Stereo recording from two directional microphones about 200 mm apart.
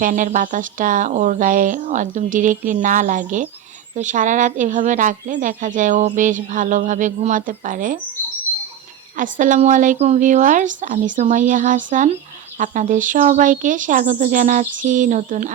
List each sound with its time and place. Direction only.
0.0 s a woman's voice: 40° right (ahead or behind)
9.1 s a woman's voice: 40° right (ahead or behind)